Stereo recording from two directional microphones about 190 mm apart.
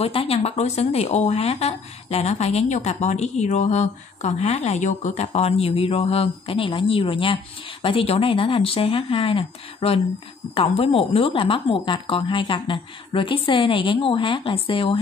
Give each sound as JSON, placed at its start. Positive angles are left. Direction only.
{"t": 0.0, "sound": "a woman's voice", "side_deg": 30}